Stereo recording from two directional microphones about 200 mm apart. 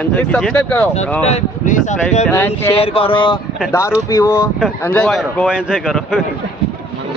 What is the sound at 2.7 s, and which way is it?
A man's voice, 30° left (ahead or behind).